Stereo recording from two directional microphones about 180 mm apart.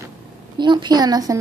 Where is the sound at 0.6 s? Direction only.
25° right (ahead or behind).